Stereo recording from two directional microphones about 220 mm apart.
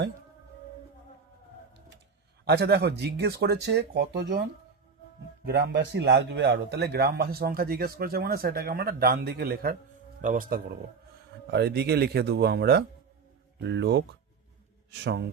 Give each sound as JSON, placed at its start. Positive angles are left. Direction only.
{"t": 2.4, "sound": "a man's voice", "side_deg": -50}
{"t": 5.5, "sound": "a man's voice", "side_deg": -50}